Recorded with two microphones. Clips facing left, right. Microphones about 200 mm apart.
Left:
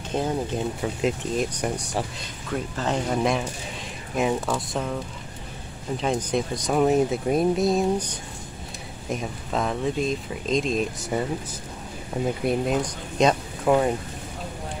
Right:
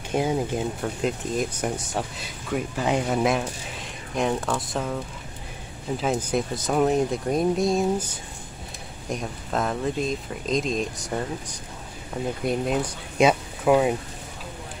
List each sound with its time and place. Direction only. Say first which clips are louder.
0.1 s speech: right 2 dB; 10° right (ahead or behind)
0.7 s speech: left 1 dB; centre (ahead or behind)
12.1 s speech: left 3 dB; 15° left (ahead or behind)
12.4 s speech: even; centre (ahead or behind)